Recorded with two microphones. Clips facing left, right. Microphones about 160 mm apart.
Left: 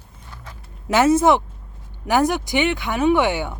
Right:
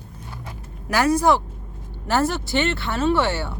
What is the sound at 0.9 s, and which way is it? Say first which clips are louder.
Speech: left 3 dB; 25° left (ahead or behind).